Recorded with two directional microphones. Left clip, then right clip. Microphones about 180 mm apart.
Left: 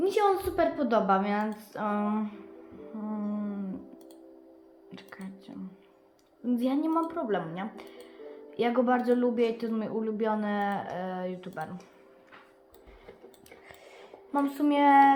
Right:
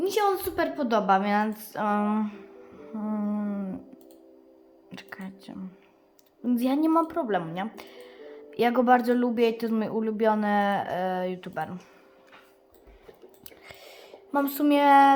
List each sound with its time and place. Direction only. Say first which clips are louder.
0.0 s a woman's voice: even; 20° right (ahead or behind); by 3.8 s 45° right (ahead or behind)
4.9 s a sound: right 5 dB; 40° right (ahead or behind)
6.4 s speech: right 4 dB; 40° right (ahead or behind)
14.3 s speech: right 3 dB; 35° right (ahead or behind)